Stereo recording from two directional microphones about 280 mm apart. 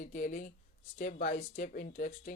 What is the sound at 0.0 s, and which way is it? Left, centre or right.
Speech, left.